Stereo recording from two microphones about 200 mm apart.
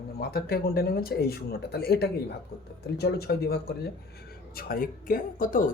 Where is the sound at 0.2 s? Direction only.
50° left (ahead or behind).